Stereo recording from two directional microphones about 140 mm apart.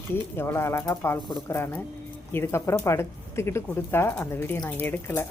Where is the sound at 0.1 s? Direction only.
15° left (ahead or behind).